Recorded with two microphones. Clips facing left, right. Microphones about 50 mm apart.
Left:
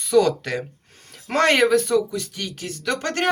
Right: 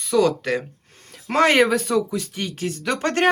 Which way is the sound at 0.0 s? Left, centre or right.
Centre.